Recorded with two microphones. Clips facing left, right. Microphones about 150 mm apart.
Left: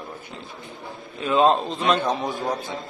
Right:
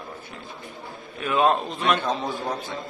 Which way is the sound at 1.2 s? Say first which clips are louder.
Left 3 dB; 25° left (ahead or behind).